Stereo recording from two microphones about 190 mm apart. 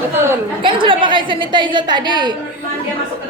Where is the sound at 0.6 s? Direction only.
25° right (ahead or behind).